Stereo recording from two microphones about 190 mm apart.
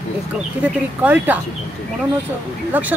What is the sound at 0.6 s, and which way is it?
Speech, 10° right (ahead or behind).